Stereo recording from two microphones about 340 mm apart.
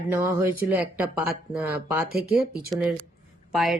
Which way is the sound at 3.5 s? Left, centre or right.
Centre.